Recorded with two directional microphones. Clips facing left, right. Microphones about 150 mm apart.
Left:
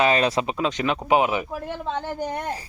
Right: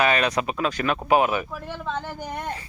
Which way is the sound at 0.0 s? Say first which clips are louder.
Left 2 dB; 30° left (ahead or behind).